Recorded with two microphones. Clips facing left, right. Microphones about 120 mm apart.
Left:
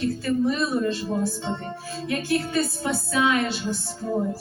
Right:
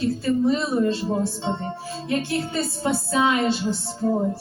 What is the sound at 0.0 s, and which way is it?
Speech, 25° right (ahead or behind).